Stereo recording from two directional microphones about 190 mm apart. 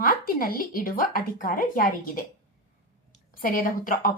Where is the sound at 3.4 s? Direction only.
50° left (ahead or behind).